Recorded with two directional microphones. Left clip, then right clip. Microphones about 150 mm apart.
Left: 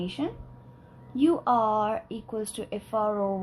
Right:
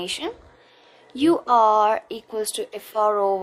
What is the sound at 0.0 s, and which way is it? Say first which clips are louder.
Speech: right 4 dB; 45° right (ahead or behind).